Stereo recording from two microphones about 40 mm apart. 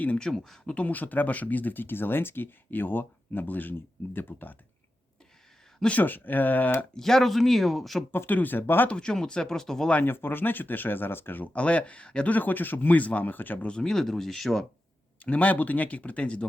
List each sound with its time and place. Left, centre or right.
0.3 s speech: centre
0.7 s speech: left
5.9 s speech: left
6.9 s speech: centre
8.3 s speech: left
9.0 s speech: centre
10.0 s speech: left
11.5 s speech: left
12.3 s speech: left
13.6 s speech: left
13.8 s speech: centre
15.2 s speech: left